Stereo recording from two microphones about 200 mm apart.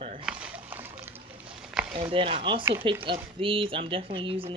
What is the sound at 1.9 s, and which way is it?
Speech, 25° right (ahead or behind).